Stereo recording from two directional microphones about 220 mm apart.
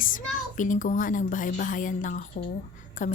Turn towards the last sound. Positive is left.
turn(degrees=35)  # may be behind; listen again after turning